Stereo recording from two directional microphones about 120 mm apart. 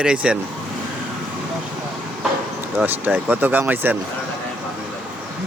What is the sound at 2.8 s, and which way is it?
Speech, 15° right (ahead or behind).